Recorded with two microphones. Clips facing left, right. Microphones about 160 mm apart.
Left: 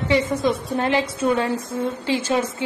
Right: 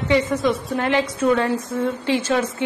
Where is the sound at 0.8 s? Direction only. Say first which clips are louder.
Right 1 dB; 25° left (ahead or behind).